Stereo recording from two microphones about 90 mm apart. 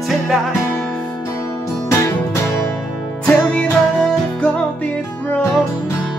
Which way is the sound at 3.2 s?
10° left (ahead or behind).